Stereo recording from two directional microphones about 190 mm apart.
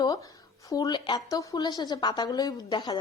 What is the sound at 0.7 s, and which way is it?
A woman's voice, 20° left (ahead or behind).